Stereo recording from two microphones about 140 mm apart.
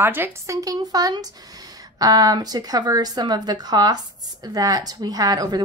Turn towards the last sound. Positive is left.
turn(degrees=-30)  # may be behind; listen again after turning